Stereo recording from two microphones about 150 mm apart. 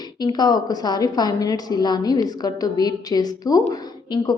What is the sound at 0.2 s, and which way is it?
A woman's voice, 25° left (ahead or behind).